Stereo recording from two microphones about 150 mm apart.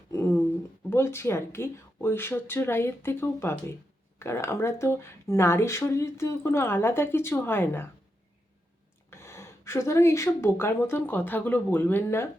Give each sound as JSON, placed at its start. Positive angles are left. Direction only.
{"t": 0.9, "sound": "speech", "side_deg": 15}
{"t": 9.0, "sound": "speech", "side_deg": 20}